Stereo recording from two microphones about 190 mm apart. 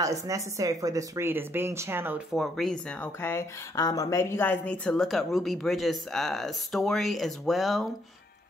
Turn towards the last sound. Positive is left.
turn(degrees=0)  # may be behind; listen again after turning